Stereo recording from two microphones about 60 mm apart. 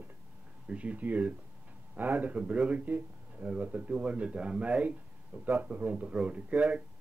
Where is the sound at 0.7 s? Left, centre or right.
Right.